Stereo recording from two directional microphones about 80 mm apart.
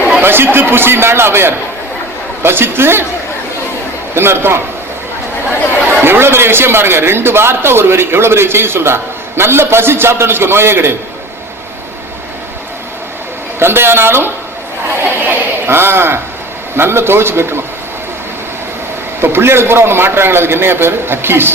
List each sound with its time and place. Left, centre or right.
0.2 s a man's voice: right
4.1 s a man's voice: right
5.9 s a man's voice: right
13.6 s a man's voice: right
19.2 s a man's voice: right